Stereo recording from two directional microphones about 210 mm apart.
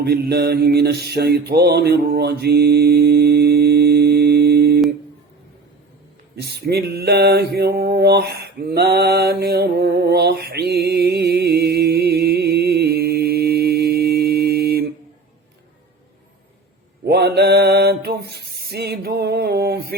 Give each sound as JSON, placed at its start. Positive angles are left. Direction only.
{"t": 0.0, "sound": "mantra", "side_deg": -50}
{"t": 6.4, "sound": "mantra", "side_deg": -50}
{"t": 17.1, "sound": "a sound", "side_deg": -50}